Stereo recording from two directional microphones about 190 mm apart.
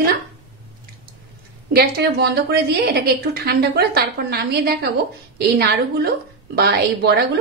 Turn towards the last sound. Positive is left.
turn(degrees=-60)  # may be behind; listen again after turning